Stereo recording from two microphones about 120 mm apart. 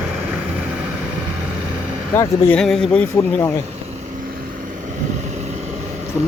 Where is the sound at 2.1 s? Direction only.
20° left (ahead or behind).